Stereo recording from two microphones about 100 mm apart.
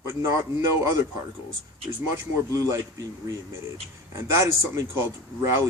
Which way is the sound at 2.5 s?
35° right (ahead or behind).